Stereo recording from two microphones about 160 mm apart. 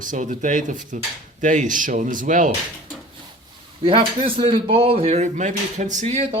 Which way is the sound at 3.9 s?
35° right (ahead or behind).